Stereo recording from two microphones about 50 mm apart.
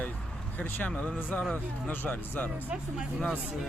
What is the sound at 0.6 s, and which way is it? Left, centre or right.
Speech, left.